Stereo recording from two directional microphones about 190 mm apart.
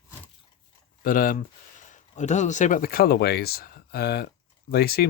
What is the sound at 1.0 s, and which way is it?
Speech, 50° left (ahead or behind).